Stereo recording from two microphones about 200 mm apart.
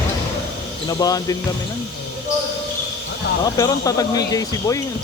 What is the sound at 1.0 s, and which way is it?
Speech, 20° left (ahead or behind).